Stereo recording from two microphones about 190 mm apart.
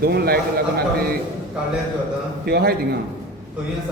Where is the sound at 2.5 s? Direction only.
55° right (ahead or behind).